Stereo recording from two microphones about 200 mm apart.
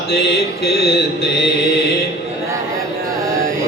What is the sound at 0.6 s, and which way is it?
Mantra, 55° left (ahead or behind).